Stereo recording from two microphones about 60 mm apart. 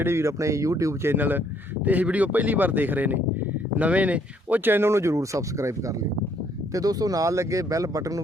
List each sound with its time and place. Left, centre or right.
0.0 s speech: right
1.0 s speech: right
6.7 s speech: right